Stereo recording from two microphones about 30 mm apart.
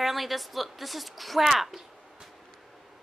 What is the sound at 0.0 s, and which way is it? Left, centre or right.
A woman's voice, centre.